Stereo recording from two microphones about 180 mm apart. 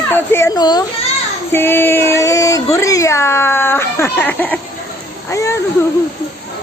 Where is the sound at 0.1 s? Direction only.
15° left (ahead or behind).